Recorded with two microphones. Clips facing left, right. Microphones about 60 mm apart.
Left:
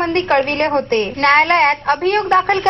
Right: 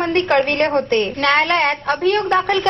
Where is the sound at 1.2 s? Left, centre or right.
Left.